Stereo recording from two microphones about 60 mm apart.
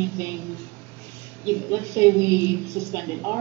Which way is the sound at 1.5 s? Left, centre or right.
Right.